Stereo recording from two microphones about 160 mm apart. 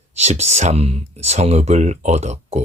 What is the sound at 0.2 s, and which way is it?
Speech, 45° right (ahead or behind).